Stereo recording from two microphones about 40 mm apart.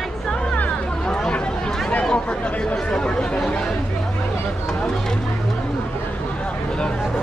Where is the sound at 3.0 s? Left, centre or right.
Left.